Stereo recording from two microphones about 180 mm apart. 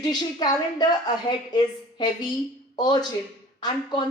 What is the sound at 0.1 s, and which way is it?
A woman's voice, 25° left (ahead or behind).